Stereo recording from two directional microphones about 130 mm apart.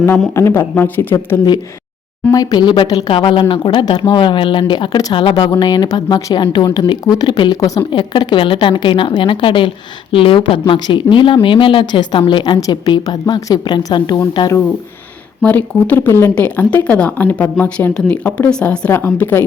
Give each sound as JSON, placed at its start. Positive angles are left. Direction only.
{"t": 0.3, "sound": "speech", "side_deg": 20}
{"t": 2.3, "sound": "speech", "side_deg": 30}
{"t": 15.4, "sound": "speech", "side_deg": 10}
{"t": 18.9, "sound": "speech", "side_deg": 20}